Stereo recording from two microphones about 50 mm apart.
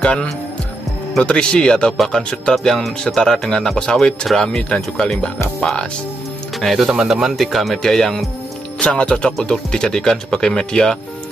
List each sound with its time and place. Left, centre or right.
0.0 s speech: left
2.0 s speech: centre
6.6 s speech: centre
6.9 s speech: centre
8.7 s speech: left